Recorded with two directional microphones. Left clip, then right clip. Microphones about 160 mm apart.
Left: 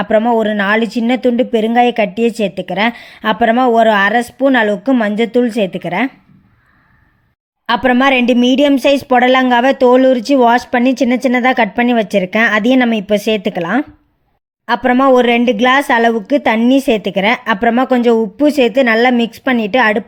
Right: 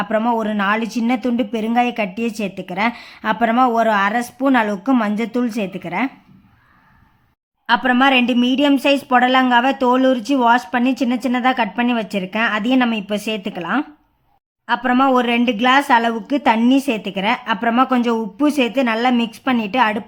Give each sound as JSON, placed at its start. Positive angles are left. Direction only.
{"t": 0.2, "sound": "speech", "side_deg": 10}
{"t": 7.7, "sound": "a woman's voice", "side_deg": 20}